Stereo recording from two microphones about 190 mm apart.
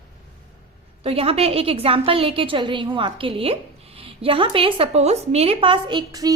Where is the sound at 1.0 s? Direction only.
30° right (ahead or behind).